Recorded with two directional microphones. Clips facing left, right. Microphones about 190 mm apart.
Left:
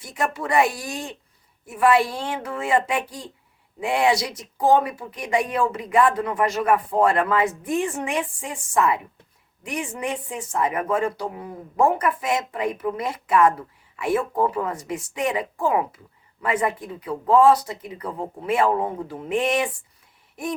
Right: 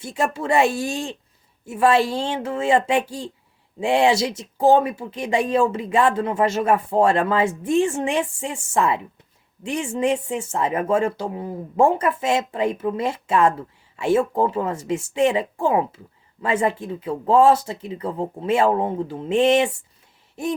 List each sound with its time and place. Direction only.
0.0 s speech: 25° right (ahead or behind)